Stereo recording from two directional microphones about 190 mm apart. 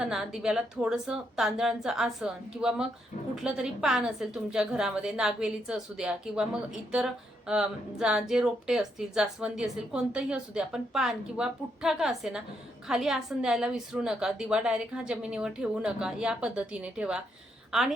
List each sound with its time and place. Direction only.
0.0 s a woman's voice: 5° right (ahead or behind)